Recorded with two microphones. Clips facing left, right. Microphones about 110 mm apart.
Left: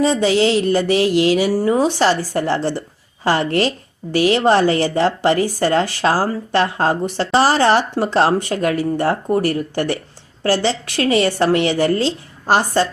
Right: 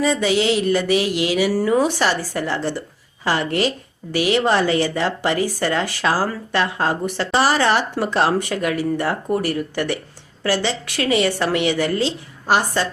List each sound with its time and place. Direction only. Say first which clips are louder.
0.0 s speech: left 3 dB; 30° left (ahead or behind)